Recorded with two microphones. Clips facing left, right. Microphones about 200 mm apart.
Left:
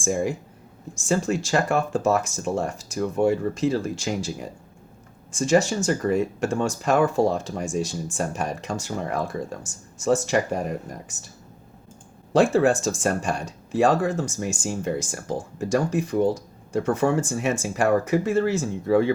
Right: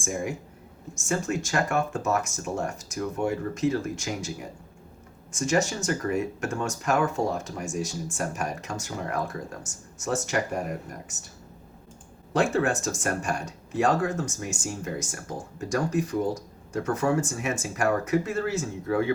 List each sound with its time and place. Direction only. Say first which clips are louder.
0.0 s speech: left 6 dB; 30° left (ahead or behind)
5.3 s speech: left 5 dB; 30° left (ahead or behind)
12.3 s speech: left 6 dB; 30° left (ahead or behind)